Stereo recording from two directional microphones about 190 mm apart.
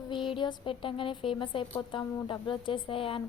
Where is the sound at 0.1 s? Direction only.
25° left (ahead or behind).